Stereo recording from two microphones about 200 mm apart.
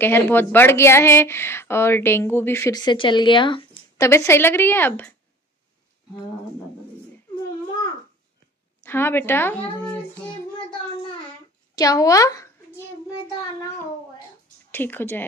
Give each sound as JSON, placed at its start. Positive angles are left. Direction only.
{"t": 0.0, "sound": "speech", "side_deg": 10}
{"t": 4.1, "sound": "speech", "side_deg": 10}
{"t": 8.8, "sound": "speech", "side_deg": 10}
{"t": 11.7, "sound": "speech", "side_deg": 20}
{"t": 14.7, "sound": "speech", "side_deg": 10}